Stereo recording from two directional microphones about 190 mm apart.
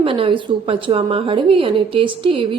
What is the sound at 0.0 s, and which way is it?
A woman's voice, 30° right (ahead or behind).